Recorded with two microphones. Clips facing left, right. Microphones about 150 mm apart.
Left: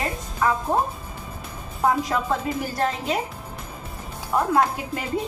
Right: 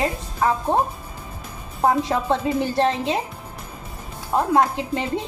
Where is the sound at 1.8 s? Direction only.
30° right (ahead or behind).